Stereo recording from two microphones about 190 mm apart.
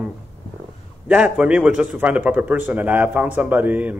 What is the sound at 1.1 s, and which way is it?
Speech, 5° right (ahead or behind).